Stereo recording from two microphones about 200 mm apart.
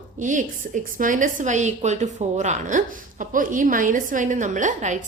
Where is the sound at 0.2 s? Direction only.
40° right (ahead or behind).